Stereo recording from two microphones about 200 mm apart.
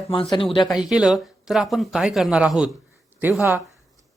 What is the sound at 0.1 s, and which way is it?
Speech, 25° left (ahead or behind).